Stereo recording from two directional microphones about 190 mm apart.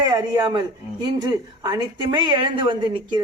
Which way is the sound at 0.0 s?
20° right (ahead or behind).